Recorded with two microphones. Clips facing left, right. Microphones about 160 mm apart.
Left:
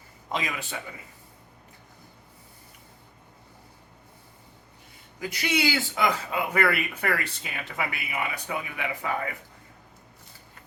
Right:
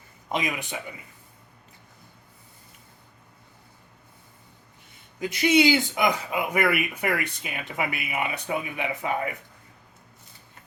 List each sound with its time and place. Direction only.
0.3 s speech: 20° right (ahead or behind)
5.2 s speech: 20° right (ahead or behind)